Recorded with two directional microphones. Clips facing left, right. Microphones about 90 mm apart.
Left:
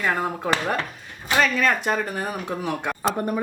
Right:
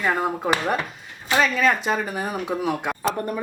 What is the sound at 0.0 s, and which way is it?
Speech, 10° right (ahead or behind).